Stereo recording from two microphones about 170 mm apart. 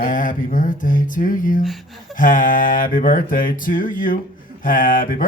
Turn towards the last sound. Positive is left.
turn(degrees=55)  # may be behind; listen again after turning